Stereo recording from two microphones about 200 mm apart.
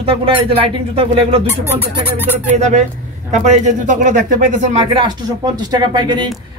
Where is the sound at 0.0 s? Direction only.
25° right (ahead or behind).